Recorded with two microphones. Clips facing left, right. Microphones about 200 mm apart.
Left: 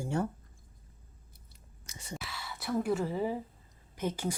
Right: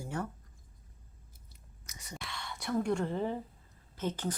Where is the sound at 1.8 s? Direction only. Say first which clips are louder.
Left 5 dB; 30° left (ahead or behind).